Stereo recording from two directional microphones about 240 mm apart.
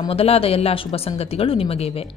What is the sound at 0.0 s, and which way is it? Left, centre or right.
A woman's voice, left.